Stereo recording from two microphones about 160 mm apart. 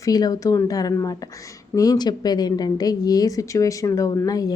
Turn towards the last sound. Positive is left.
turn(degrees=25)  # may be behind; listen again after turning